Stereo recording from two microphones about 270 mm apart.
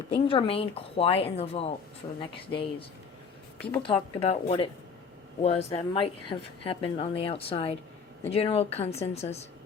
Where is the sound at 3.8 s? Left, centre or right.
Left.